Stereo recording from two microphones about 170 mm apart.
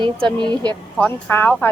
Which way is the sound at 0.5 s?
25° right (ahead or behind).